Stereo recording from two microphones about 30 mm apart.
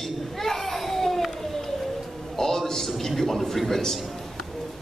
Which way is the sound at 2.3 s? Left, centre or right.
Centre.